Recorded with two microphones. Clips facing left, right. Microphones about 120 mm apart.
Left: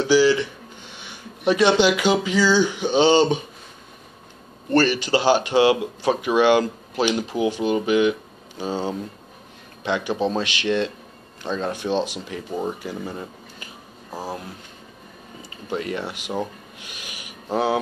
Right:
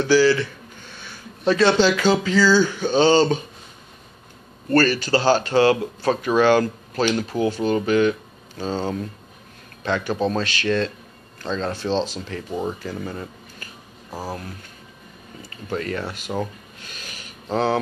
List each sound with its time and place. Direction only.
0.0 s speech: 15° left (ahead or behind)
4.6 s speech: 15° left (ahead or behind)
15.5 s speech: 15° left (ahead or behind)